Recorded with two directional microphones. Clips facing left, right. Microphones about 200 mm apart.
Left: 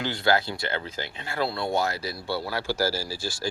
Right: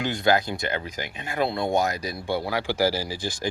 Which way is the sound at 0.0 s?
15° right (ahead or behind).